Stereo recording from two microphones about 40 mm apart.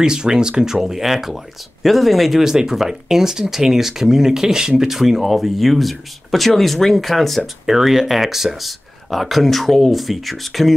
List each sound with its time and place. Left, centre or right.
0.0 s speech: centre
0.7 s speech: centre
7.6 s speech: centre